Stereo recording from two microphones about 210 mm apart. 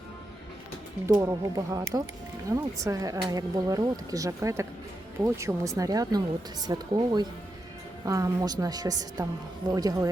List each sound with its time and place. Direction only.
1.0 s speech: 15° right (ahead or behind)